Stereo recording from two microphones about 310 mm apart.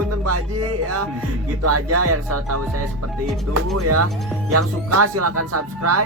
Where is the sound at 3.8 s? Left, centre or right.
Right.